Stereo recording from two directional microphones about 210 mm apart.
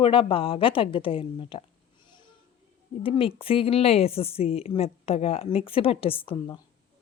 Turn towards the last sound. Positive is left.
turn(degrees=20)  # may be behind; listen again after turning